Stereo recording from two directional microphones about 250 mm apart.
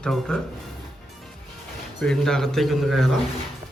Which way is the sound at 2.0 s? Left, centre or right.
Centre.